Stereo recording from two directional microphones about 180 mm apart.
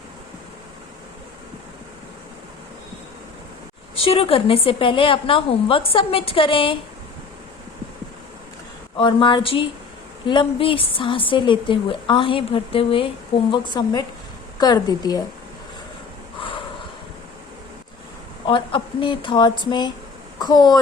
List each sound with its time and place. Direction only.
3.9 s a woman's voice: 30° left (ahead or behind)
9.0 s a woman's voice: 25° left (ahead or behind)
16.4 s snort: 30° left (ahead or behind)
18.4 s a woman's voice: 25° left (ahead or behind)